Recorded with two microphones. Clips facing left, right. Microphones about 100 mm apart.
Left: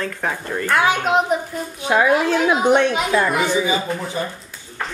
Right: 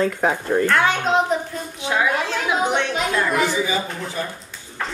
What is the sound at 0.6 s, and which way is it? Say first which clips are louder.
Speech: left 3 dB; 10° left (ahead or behind).